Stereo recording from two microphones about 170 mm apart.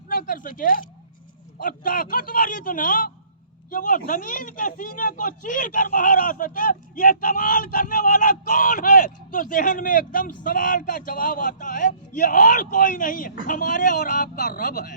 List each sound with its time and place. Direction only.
0.1 s a man's voice: 55° left (ahead or behind)